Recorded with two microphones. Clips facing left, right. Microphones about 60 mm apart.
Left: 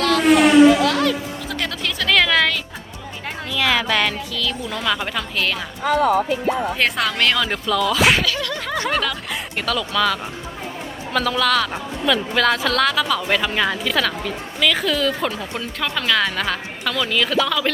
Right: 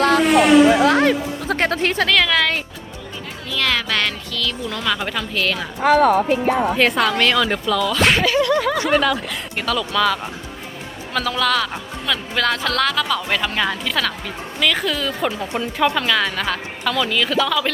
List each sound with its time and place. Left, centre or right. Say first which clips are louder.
0.9 s music: right 4 dB; right
2.0 s a sound: left 4 dB; centre
3.5 s speech: left 1 dB; centre
5.8 s speech: right 3 dB; right
6.7 s speech: right 3 dB; centre
8.2 s a sound: right 7 dB; right
8.5 s speech: right 5 dB; centre